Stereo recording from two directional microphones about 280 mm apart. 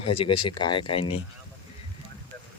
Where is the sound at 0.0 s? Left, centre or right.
Centre.